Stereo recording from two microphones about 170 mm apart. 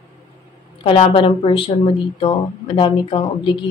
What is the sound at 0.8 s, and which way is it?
Speech, 30° left (ahead or behind).